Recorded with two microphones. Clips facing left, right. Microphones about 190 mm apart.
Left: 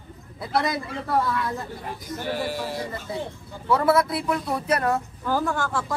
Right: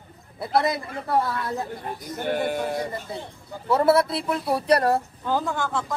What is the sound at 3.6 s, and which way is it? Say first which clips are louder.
Speech: right 1 dB; 25° right (ahead or behind).